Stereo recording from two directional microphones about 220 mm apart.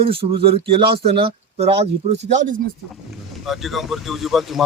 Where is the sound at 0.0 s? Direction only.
25° right (ahead or behind).